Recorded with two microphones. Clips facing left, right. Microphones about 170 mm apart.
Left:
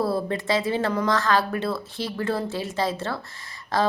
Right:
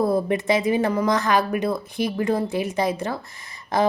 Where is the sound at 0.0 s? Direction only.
20° right (ahead or behind).